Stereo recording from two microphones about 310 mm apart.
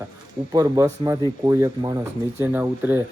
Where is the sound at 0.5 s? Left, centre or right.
Centre.